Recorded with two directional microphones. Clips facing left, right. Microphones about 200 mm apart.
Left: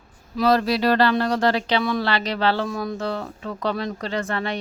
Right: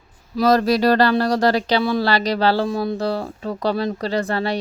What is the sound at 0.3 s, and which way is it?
Speech, 40° right (ahead or behind).